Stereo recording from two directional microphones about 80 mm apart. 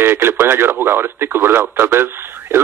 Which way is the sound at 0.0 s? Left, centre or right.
Right.